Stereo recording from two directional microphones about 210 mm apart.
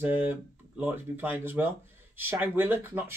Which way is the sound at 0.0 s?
10° right (ahead or behind).